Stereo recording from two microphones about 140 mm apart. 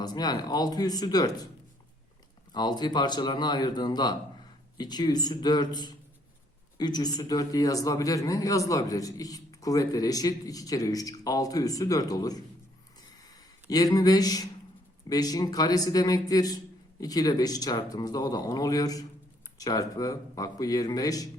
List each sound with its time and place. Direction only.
0.0 s a man's voice: 30° left (ahead or behind)
2.5 s a man's voice: 30° left (ahead or behind)